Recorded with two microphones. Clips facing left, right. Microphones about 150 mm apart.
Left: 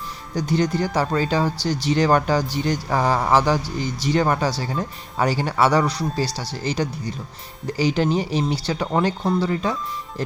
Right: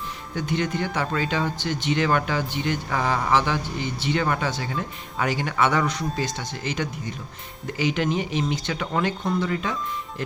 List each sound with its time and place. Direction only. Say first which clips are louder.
0.3 s speech: left 5 dB; 35° left (ahead or behind)